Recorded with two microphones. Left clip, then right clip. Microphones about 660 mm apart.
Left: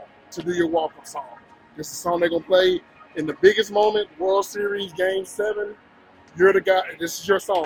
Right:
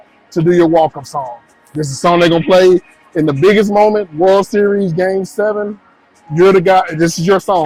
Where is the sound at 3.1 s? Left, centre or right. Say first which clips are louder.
Right 13 dB; right.